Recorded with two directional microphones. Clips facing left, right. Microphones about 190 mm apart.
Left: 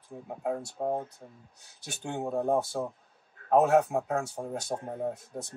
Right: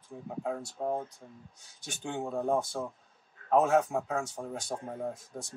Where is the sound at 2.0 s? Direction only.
Centre (ahead or behind).